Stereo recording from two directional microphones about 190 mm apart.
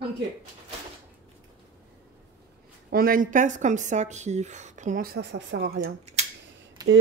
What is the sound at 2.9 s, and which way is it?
Speech, 50° right (ahead or behind).